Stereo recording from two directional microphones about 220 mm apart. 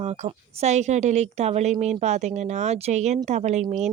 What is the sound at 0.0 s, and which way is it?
Speech, 30° right (ahead or behind).